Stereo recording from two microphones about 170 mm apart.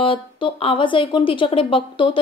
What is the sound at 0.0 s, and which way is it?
A woman's voice, 30° left (ahead or behind).